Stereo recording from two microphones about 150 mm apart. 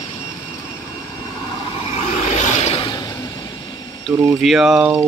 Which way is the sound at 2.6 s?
45° left (ahead or behind).